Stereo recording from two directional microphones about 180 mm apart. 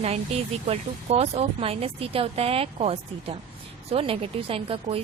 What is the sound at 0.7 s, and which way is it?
Speech, 35° right (ahead or behind).